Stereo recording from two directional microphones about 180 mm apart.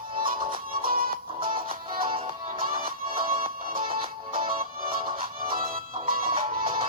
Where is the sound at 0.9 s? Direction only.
50° right (ahead or behind).